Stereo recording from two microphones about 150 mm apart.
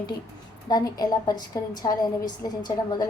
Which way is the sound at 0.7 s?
25° left (ahead or behind).